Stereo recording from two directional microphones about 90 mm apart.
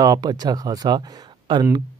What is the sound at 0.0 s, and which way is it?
Speech, 45° right (ahead or behind).